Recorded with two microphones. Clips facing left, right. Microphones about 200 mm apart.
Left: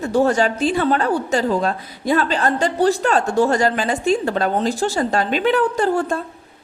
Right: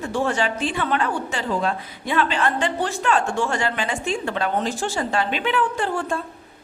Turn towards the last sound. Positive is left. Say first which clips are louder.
# left 6 dB
turn(degrees=40)  # may be behind; listen again after turning